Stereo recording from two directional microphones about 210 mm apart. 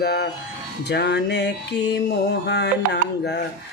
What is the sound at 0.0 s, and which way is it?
Mantra, 50° left (ahead or behind).